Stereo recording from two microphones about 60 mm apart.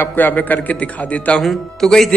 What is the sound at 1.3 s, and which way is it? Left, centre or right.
Speech, centre.